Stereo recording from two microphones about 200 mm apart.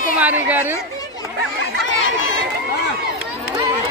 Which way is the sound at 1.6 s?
70° left (ahead or behind).